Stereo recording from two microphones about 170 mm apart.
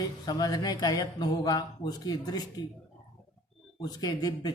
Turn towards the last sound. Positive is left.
turn(degrees=25)  # may be behind; listen again after turning